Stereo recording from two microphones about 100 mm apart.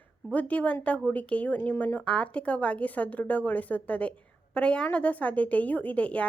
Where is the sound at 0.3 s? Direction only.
15° left (ahead or behind).